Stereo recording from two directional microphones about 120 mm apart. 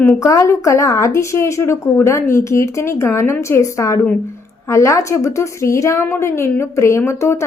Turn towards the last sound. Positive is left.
turn(degrees=20)  # may be behind; listen again after turning